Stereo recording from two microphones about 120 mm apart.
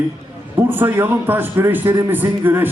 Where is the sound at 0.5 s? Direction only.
20° right (ahead or behind).